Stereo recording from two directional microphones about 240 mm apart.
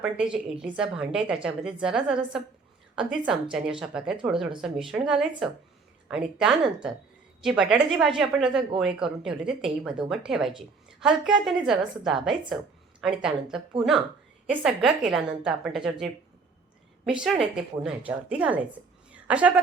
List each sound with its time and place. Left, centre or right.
0.0 s a woman's voice: centre
17.1 s a woman's voice: centre
19.1 s a sound: centre